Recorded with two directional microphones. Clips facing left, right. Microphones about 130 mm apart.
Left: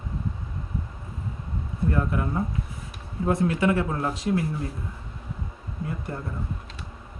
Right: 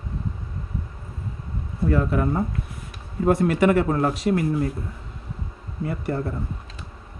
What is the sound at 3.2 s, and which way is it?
Speech, 70° right (ahead or behind).